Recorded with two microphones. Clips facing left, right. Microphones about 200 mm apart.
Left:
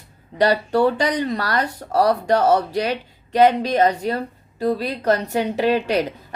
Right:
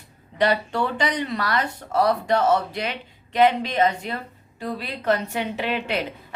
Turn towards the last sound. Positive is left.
turn(degrees=40)  # may be behind; listen again after turning